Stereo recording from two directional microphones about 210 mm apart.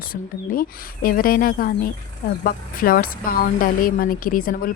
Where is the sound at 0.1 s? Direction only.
45° left (ahead or behind).